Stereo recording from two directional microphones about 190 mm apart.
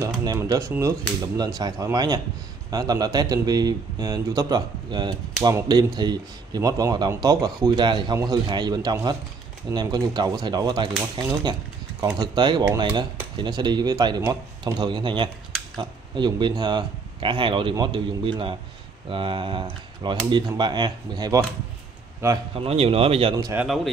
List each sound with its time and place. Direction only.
0.0 s speech: 20° right (ahead or behind)
22.6 s speech: 30° right (ahead or behind)
23.3 s speech: 15° right (ahead or behind)